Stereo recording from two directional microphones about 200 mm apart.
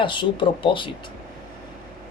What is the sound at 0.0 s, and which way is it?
Speech, 25° left (ahead or behind).